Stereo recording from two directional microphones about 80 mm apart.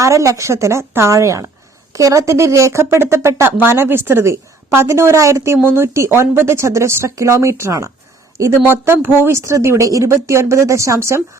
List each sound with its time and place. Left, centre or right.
0.0 s speech: right
8.6 s speech: right